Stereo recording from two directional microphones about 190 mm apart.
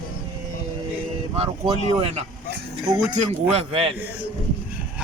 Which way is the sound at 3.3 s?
30° right (ahead or behind).